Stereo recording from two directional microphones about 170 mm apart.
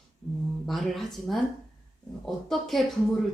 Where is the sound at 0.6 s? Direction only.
Centre (ahead or behind).